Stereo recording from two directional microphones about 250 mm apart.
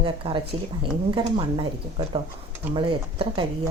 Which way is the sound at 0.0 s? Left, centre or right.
Centre.